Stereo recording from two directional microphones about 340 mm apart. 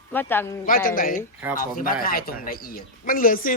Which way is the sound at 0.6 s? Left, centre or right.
Left.